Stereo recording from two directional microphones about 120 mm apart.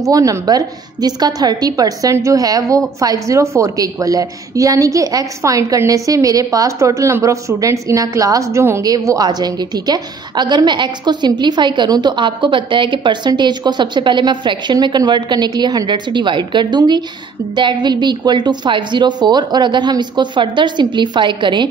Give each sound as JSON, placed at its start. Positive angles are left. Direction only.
{"t": 0.0, "sound": "a woman's voice", "side_deg": -30}